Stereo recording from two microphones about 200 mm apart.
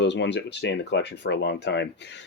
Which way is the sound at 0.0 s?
60° left (ahead or behind).